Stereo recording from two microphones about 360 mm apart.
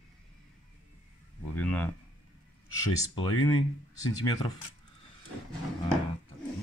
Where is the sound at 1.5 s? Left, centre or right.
Centre.